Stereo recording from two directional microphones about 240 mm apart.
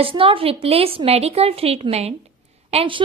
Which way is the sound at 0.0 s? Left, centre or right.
Right.